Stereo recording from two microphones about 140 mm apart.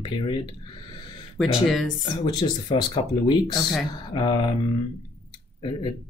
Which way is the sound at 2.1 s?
30° left (ahead or behind).